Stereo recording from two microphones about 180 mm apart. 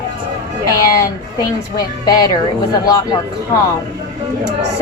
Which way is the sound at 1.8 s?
20° left (ahead or behind).